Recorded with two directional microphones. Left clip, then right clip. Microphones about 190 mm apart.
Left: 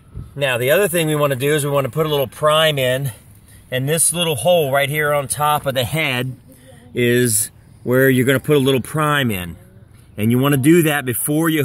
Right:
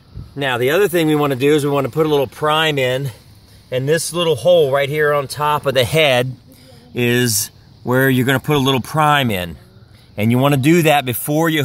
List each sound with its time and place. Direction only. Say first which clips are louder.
0.4 s speech: even; 40° right (ahead or behind); by 6.2 s 60° right (ahead or behind)
6.9 s speech: even; 45° right (ahead or behind)